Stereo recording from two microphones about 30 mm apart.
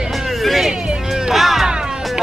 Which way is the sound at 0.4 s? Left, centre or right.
Centre.